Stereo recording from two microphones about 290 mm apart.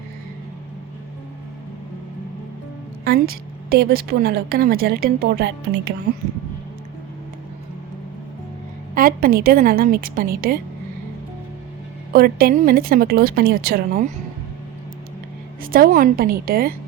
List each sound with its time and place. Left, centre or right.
3.0 s a woman's voice: right
9.0 s a woman's voice: right
12.1 s a woman's voice: right
15.6 s a woman's voice: right